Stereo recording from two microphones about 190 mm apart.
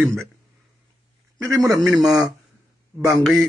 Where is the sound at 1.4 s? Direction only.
15° right (ahead or behind).